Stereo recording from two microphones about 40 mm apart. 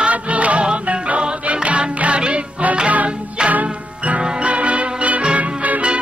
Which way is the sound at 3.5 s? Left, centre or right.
Right.